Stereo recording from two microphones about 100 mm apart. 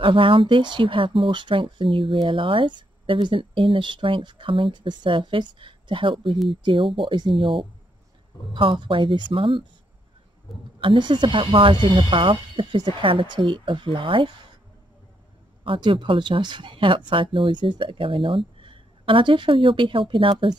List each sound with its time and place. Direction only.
0.0 s speech: 60° right (ahead or behind)
10.8 s speech: 55° right (ahead or behind)
15.6 s speech: 60° right (ahead or behind)